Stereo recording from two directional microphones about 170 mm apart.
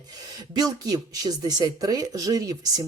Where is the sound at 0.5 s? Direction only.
25° right (ahead or behind).